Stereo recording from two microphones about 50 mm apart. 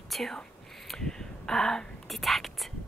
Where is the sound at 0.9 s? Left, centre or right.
Centre.